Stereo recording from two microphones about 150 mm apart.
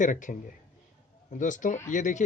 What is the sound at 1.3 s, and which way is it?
Speech, 55° left (ahead or behind).